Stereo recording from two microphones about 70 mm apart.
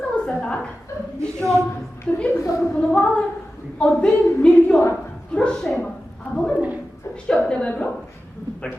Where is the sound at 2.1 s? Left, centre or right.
Centre.